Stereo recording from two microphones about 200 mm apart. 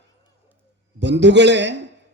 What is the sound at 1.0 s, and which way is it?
Speech, 60° right (ahead or behind).